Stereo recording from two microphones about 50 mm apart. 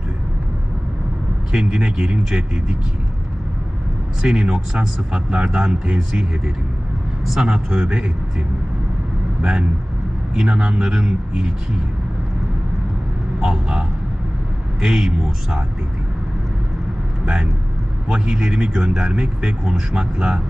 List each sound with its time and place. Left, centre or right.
1.5 s speech: centre
4.2 s speech: centre
13.4 s speech: centre
18.0 s speech: centre